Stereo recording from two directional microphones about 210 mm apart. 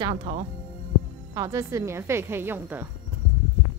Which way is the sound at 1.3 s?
15° right (ahead or behind).